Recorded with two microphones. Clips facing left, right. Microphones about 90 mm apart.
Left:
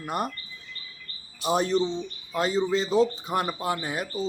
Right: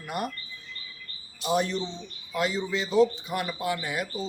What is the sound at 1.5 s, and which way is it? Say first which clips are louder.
Speech: left 4 dB; 40° left (ahead or behind).